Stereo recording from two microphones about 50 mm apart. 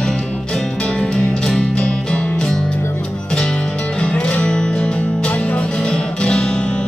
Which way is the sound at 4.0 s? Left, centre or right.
Centre.